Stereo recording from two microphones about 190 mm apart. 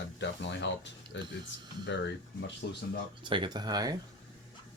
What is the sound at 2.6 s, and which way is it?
Speech, 60° left (ahead or behind).